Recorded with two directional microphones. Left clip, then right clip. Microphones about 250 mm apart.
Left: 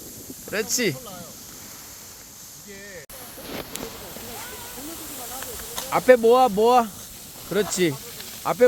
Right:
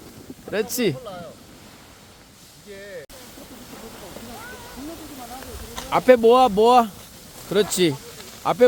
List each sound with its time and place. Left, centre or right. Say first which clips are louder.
0.5 s speech: right 1 dB; centre
5.9 s speech: right 1 dB; centre